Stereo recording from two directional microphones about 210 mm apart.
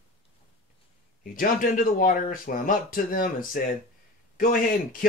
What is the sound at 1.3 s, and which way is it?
Speech, 40° left (ahead or behind).